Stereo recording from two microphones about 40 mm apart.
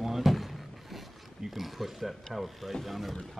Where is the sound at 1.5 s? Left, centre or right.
Centre.